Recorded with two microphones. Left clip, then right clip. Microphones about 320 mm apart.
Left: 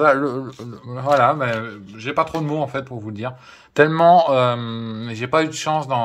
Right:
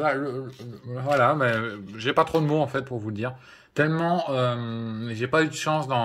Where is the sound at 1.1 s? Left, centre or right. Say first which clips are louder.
Left 4 dB; centre.